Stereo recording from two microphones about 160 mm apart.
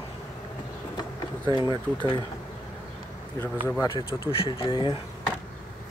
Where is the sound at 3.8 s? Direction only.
30° left (ahead or behind).